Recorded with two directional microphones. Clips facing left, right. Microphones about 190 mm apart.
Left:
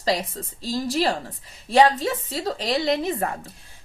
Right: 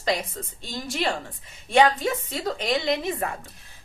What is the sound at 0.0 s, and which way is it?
A woman's voice, 35° left (ahead or behind).